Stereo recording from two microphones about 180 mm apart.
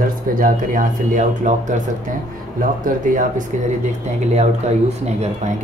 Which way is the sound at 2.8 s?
45° right (ahead or behind).